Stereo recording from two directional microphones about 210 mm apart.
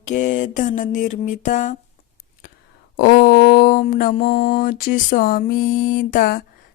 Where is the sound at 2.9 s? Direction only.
50° left (ahead or behind).